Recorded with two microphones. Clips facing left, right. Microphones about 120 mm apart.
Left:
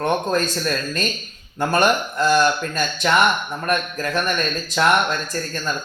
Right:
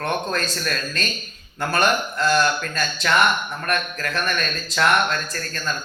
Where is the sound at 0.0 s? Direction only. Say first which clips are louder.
Left 4 dB; 20° left (ahead or behind).